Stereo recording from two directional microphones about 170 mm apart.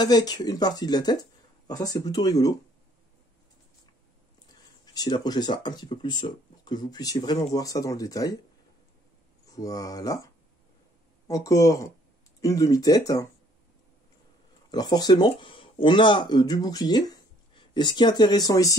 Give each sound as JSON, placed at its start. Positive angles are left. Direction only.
{"t": 0.0, "sound": "speech", "side_deg": 25}
{"t": 4.9, "sound": "speech", "side_deg": 25}
{"t": 9.6, "sound": "speech", "side_deg": 20}
{"t": 14.7, "sound": "speech", "side_deg": 25}